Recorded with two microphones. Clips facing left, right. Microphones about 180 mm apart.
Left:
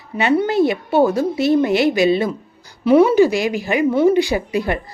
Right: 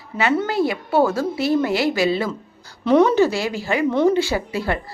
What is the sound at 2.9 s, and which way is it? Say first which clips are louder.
A woman's voice: left 3 dB; 10° left (ahead or behind).